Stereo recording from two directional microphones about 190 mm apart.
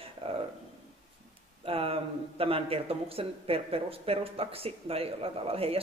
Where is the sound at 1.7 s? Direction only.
30° right (ahead or behind).